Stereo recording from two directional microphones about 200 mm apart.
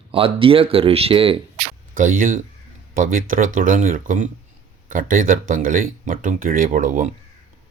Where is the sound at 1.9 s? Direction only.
45° right (ahead or behind).